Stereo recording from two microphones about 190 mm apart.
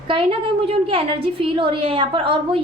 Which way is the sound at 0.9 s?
30° right (ahead or behind).